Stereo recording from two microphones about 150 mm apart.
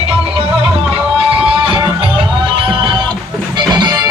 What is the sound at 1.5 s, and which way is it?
Music, 35° right (ahead or behind).